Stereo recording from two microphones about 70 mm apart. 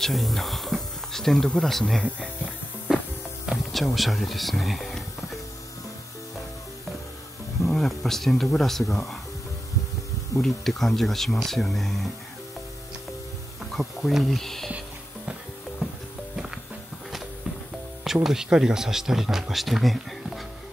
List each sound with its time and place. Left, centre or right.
0.0 s speech: centre
2.0 s speech: centre
2.9 s music: centre
3.7 s speech: centre
7.6 s speech: centre
10.4 s speech: centre
13.7 s speech: centre
18.0 s speech: centre